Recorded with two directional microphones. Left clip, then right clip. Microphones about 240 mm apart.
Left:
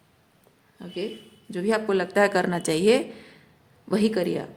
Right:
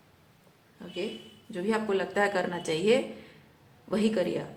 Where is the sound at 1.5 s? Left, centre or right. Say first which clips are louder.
Left 5 dB; left.